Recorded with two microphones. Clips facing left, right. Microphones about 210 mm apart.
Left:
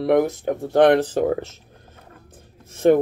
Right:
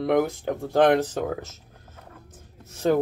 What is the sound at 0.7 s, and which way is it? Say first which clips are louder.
Speech: left 4 dB; 70° left (ahead or behind).